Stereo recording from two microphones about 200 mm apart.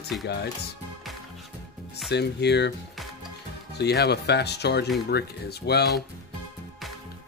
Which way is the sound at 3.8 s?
55° left (ahead or behind).